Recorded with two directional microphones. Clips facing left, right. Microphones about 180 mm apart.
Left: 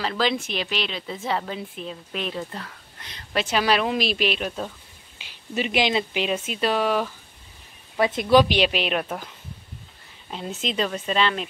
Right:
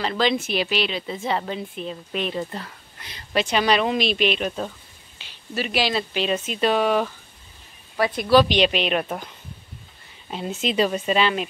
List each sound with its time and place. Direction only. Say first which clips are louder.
0.0 s speech: right 2 dB; centre (ahead or behind)
5.2 s speech: left 1 dB; 20° left (ahead or behind)
6.2 s speech: right 2 dB; 10° left (ahead or behind)
8.0 s speech: even; 20° left (ahead or behind); by 9.3 s centre (ahead or behind)
10.3 s speech: right 4 dB; 5° right (ahead or behind)